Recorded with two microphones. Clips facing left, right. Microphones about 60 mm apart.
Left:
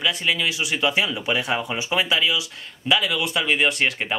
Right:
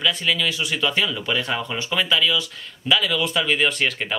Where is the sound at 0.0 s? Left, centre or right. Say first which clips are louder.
Right 1 dB; centre.